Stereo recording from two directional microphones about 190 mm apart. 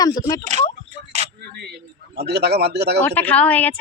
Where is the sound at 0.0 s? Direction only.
20° left (ahead or behind).